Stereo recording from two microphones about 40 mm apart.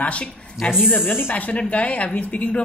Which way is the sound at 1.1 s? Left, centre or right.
Left.